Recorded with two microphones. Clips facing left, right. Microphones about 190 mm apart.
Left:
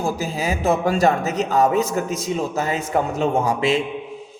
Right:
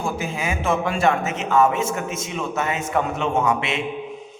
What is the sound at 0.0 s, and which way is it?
A man's voice, 35° left (ahead or behind).